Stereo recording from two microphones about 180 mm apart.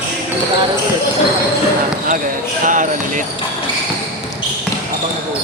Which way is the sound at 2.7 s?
45° right (ahead or behind).